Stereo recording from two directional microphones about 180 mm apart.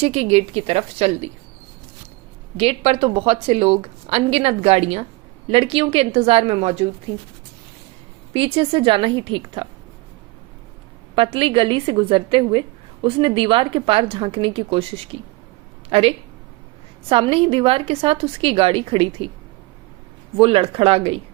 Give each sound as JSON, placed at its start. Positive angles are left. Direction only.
{"t": 0.0, "sound": "a woman's voice", "side_deg": -35}
{"t": 2.6, "sound": "a woman's voice", "side_deg": -30}
{"t": 8.3, "sound": "a woman's voice", "side_deg": -30}
{"t": 11.1, "sound": "a woman's voice", "side_deg": -30}
{"t": 20.3, "sound": "a woman's voice", "side_deg": -30}